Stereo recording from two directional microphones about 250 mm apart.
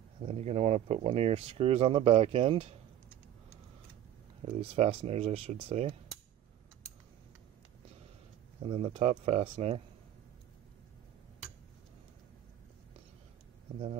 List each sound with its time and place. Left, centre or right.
0.3 s speech: right
4.5 s speech: right
8.6 s speech: right